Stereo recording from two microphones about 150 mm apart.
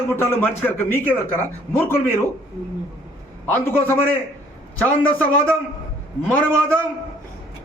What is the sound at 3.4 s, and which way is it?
Speech, 10° left (ahead or behind).